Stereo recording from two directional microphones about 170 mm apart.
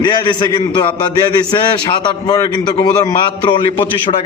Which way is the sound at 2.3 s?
20° left (ahead or behind).